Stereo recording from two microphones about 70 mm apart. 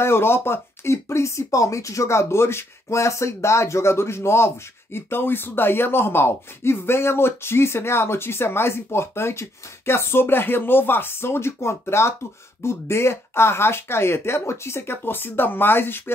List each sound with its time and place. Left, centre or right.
0.0 s speech: left